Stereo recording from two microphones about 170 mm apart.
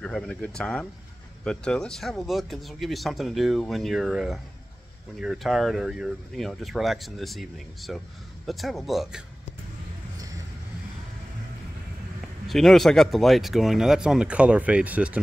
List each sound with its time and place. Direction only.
0.0 s speech: 5° left (ahead or behind)
10.1 s vehicle: 20° right (ahead or behind)
12.2 s speech: centre (ahead or behind)